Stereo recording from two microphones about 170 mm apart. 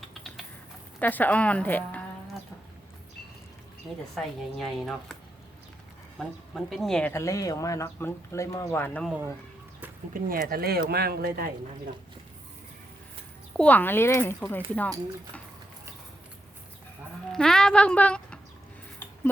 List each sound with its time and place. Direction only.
0.9 s speech: 10° left (ahead or behind)
4.1 s speech: centre (ahead or behind)
6.1 s speech: centre (ahead or behind)
7.1 s speech: 20° left (ahead or behind)
10.2 s speech: 55° right (ahead or behind)
13.6 s speech: 10° left (ahead or behind)
17.3 s speech: 5° left (ahead or behind)